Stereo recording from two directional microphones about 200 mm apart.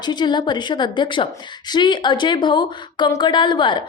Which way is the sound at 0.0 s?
20° left (ahead or behind).